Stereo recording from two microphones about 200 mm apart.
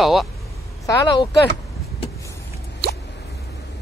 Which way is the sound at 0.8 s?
25° left (ahead or behind).